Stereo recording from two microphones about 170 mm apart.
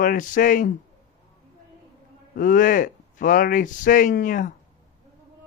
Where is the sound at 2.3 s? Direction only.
50° left (ahead or behind).